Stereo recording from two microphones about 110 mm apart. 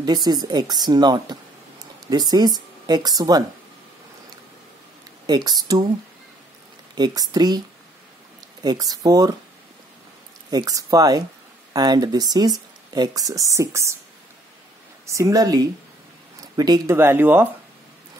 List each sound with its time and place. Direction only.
0.0 s speech: 40° right (ahead or behind)
5.2 s speech: 40° right (ahead or behind)
7.0 s speech: 40° right (ahead or behind)
8.6 s speech: 35° right (ahead or behind)
10.5 s speech: 35° right (ahead or behind)
15.0 s speech: 30° right (ahead or behind)
16.9 s speech: 20° right (ahead or behind)